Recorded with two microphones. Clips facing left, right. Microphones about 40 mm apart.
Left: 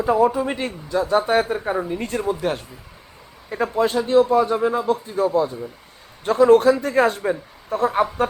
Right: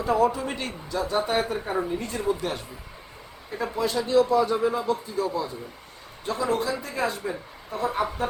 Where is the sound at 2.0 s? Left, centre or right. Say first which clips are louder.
Left 3 dB; left.